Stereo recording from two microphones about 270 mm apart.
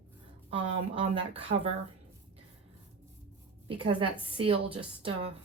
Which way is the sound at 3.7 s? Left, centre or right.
Centre.